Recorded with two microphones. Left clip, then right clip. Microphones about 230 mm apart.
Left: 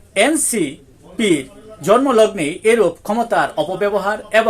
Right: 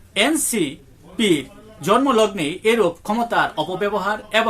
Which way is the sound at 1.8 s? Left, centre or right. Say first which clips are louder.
Left 4 dB; centre.